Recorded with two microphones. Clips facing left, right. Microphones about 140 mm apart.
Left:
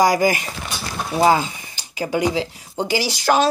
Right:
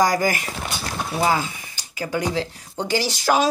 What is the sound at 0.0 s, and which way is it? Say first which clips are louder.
Speech: left 3 dB; 15° left (ahead or behind).